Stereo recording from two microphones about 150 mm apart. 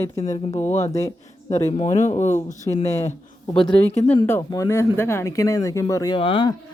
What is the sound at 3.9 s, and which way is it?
Speech, 45° left (ahead or behind).